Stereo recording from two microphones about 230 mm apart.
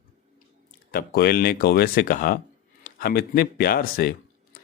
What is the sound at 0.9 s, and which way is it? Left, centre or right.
Speech, left.